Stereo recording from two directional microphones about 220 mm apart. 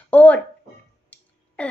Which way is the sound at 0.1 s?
5° left (ahead or behind).